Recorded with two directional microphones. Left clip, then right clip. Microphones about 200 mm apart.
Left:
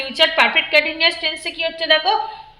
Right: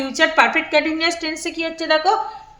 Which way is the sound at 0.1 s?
60° right (ahead or behind).